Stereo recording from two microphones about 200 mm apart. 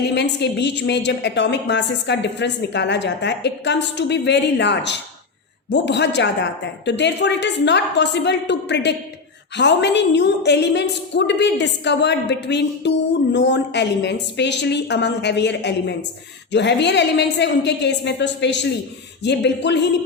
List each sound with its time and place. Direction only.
0.0 s a woman's voice: 60° left (ahead or behind)